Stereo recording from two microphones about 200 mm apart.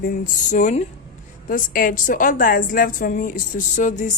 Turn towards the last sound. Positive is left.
turn(degrees=40)  # may be behind; listen again after turning